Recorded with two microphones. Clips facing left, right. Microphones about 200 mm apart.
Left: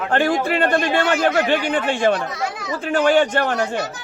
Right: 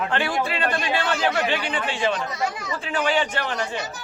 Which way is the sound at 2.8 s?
50° left (ahead or behind).